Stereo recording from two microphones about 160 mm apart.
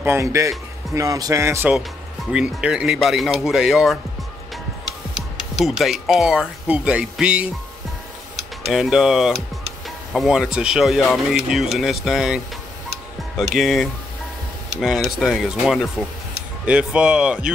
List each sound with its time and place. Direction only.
0.0 s speech: 15° right (ahead or behind)
8.6 s speech: centre (ahead or behind)
13.6 s speech: centre (ahead or behind)
15.1 s speech: 5° right (ahead or behind)